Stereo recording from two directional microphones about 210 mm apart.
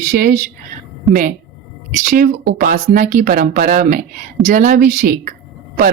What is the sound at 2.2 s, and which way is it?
Speech, 45° right (ahead or behind).